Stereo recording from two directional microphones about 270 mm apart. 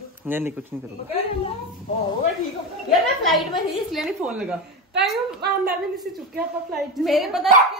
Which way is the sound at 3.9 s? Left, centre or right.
Centre.